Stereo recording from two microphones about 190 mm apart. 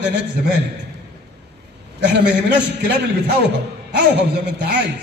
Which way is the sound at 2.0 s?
60° right (ahead or behind).